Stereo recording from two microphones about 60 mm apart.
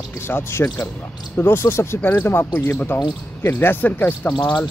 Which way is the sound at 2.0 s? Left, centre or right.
Left.